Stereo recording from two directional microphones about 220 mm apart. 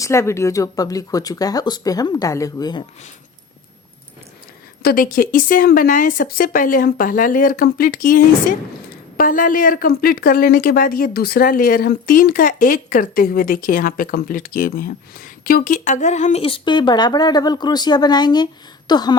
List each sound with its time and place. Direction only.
0.0 s speech: 10° left (ahead or behind)
4.8 s speech: 40° left (ahead or behind); by 19.1 s 20° left (ahead or behind)